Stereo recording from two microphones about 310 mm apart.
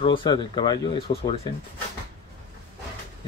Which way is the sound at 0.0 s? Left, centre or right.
Centre.